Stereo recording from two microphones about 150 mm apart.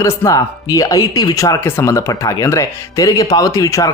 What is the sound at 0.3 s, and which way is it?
Speech, 25° left (ahead or behind).